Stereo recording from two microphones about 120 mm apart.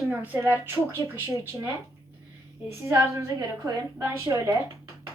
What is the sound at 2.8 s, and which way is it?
A woman's voice, 20° right (ahead or behind).